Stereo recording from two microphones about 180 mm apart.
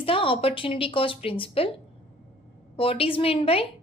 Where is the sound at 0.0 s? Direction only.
30° left (ahead or behind).